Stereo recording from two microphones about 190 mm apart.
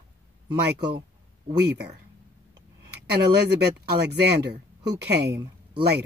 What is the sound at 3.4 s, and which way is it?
Speech, 60° right (ahead or behind).